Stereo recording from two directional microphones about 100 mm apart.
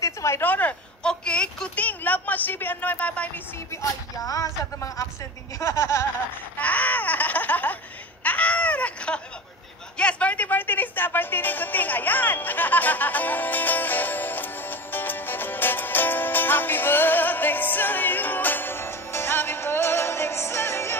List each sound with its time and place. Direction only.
0.0 s speech: 30° left (ahead or behind)
4.2 s speech: 35° left (ahead or behind)
5.6 s a sound: 30° left (ahead or behind)
6.6 s baby cry: 15° left (ahead or behind)
9.9 s music: 10° left (ahead or behind)